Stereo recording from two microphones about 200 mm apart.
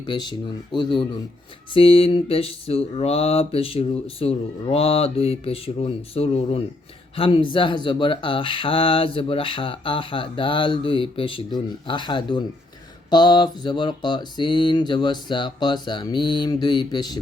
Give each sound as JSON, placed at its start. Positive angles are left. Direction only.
{"t": 0.0, "sound": "speech", "side_deg": 20}